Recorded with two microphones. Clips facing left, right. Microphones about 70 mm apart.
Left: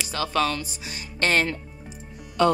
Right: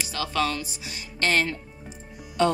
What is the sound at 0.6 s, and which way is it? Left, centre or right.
Speech, left.